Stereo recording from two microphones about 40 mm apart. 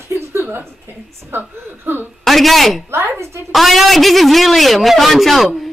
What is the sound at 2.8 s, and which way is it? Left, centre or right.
Speech, right.